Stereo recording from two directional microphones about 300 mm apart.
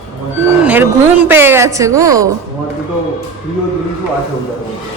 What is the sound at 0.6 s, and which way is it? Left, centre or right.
Speech, centre.